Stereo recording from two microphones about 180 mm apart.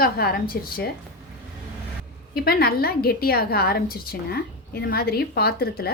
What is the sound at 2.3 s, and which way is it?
A woman's voice, 55° left (ahead or behind).